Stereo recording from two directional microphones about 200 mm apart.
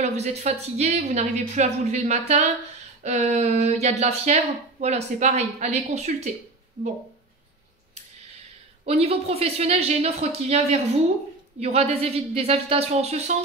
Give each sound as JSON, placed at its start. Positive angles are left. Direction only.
{"t": 0.0, "sound": "speech", "side_deg": -35}
{"t": 8.8, "sound": "speech", "side_deg": -30}